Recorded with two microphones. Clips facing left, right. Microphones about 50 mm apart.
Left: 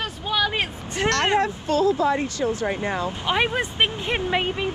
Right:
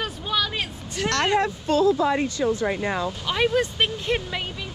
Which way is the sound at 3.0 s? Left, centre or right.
Left.